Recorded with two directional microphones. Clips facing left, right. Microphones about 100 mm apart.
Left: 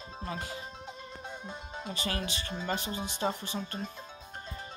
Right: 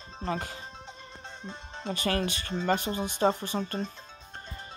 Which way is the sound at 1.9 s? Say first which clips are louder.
Right 7 dB; 55° right (ahead or behind).